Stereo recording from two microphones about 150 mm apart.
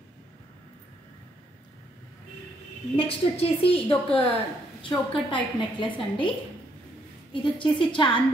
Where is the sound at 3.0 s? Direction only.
40° left (ahead or behind).